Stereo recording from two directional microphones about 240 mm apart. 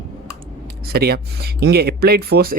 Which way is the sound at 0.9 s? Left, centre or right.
Right.